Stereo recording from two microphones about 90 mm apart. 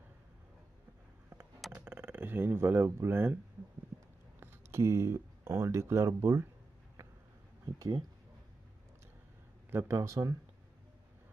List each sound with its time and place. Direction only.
1.7 s speech: 25° right (ahead or behind)
4.4 s speech: 25° right (ahead or behind)
9.7 s speech: 30° right (ahead or behind)